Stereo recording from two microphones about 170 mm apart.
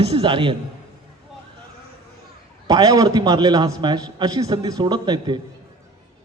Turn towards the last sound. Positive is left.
turn(degrees=-25)  # may be behind; listen again after turning